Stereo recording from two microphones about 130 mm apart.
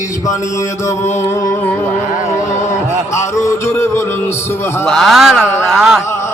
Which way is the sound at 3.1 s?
20° left (ahead or behind).